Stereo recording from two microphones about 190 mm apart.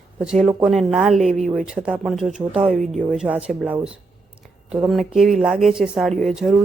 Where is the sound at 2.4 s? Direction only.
30° right (ahead or behind).